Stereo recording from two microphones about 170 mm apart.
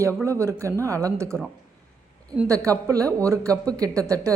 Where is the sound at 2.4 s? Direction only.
20° right (ahead or behind).